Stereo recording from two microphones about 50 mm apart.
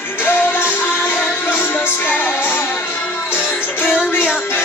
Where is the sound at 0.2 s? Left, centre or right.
Left.